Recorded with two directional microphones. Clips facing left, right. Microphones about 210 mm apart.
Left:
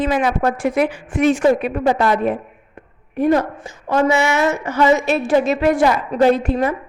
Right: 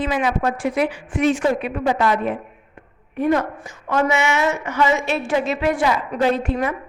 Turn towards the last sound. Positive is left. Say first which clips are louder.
# left 4 dB
turn(degrees=35)  # may be behind; listen again after turning